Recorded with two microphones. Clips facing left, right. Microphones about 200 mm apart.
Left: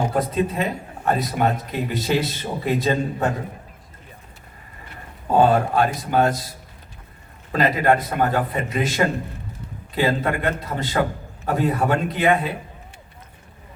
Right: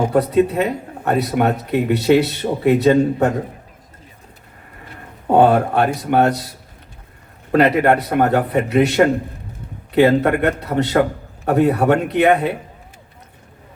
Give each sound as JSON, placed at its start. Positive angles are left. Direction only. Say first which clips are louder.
{"t": 0.1, "sound": "speech", "louder": "right 7 dB", "side_deg": -65}
{"t": 5.3, "sound": "speech", "louder": "right 4 dB", "side_deg": -65}
{"t": 7.5, "sound": "speech", "louder": "right 5 dB", "side_deg": -65}